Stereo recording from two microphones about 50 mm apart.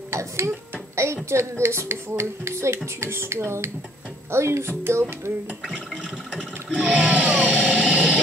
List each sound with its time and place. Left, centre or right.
0.1 s a child's voice: right
6.8 s music: right